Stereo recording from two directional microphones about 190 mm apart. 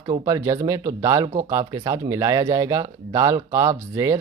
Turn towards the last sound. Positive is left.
turn(degrees=-15)  # may be behind; listen again after turning